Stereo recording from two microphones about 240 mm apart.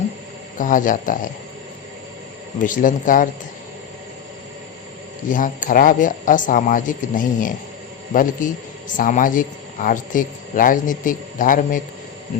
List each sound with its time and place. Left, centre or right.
0.6 s speech: left
2.6 s speech: left
5.3 s speech: left